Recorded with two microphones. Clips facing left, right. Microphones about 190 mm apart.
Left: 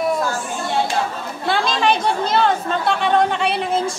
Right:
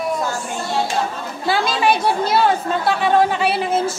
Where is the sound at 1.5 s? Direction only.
5° right (ahead or behind).